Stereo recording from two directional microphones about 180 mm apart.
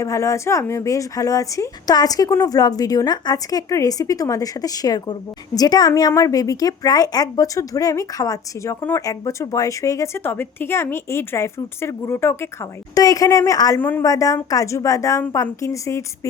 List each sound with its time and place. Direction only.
0.0 s speech: 15° left (ahead or behind)